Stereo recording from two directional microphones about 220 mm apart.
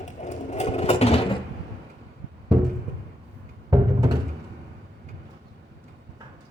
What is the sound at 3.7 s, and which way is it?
Music, 15° right (ahead or behind).